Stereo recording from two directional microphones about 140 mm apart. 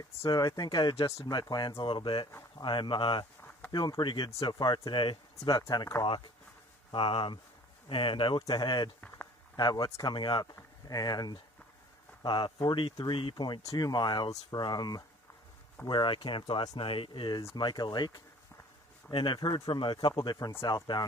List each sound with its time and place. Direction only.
0.2 s speech: 30° left (ahead or behind)
5.4 s speech: 25° left (ahead or behind)